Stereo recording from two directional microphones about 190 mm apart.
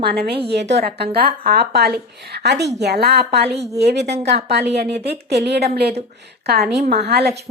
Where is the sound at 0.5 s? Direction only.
65° right (ahead or behind).